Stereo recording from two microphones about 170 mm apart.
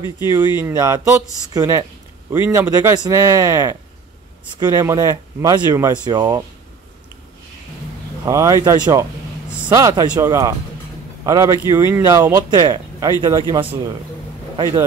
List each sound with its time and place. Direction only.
0.6 s speech: 15° right (ahead or behind)
8.3 s speech: 20° right (ahead or behind)